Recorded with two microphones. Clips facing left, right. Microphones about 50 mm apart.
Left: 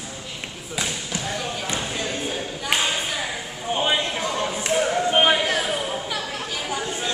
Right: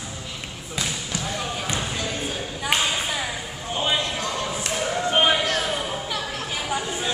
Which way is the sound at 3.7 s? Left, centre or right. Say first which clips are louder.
Left 2 dB; centre.